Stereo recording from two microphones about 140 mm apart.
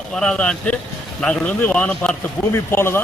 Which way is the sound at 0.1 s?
5° left (ahead or behind).